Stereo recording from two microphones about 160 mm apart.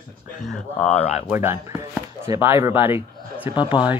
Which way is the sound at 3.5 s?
30° left (ahead or behind).